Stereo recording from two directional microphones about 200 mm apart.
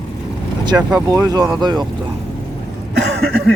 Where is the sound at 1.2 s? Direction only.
20° right (ahead or behind).